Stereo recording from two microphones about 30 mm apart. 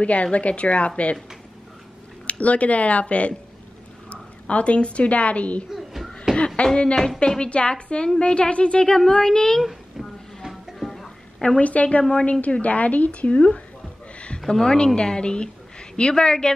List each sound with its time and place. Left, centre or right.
0.0 s speech: left
2.2 s speech: left
5.8 s a sound: centre
6.3 s a sound: left
7.2 s speech: left
7.4 s a woman's voice: left
8.8 s speech: left
9.7 s music: centre
10.8 s music: centre
11.6 s speech: left
12.0 s speech: left
12.3 s speech: left
14.5 s a woman's voice: left